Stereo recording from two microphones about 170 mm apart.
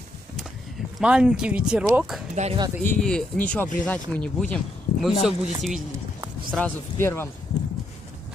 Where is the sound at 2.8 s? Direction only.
10° left (ahead or behind).